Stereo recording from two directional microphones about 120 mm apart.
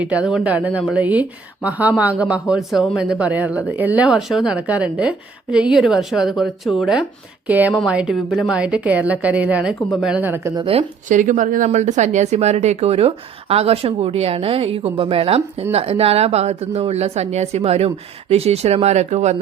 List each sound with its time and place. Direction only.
0.0 s speech: 10° right (ahead or behind)
7.4 s a woman's voice: 15° right (ahead or behind)
11.1 s speech: 90° right; by 19.4 s 70° right (ahead or behind)